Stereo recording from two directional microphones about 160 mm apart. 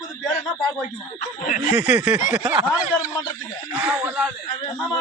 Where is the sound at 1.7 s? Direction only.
10° right (ahead or behind).